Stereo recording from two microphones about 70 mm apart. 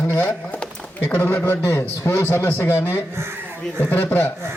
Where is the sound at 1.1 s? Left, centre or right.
Left.